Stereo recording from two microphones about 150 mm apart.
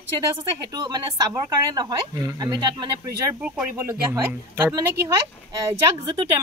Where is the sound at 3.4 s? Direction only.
10° right (ahead or behind).